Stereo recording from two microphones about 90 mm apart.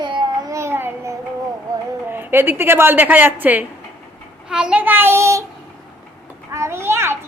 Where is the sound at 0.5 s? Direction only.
30° right (ahead or behind).